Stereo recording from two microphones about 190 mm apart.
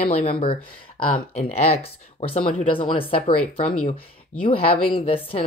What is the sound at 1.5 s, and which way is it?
A woman's voice, 35° left (ahead or behind).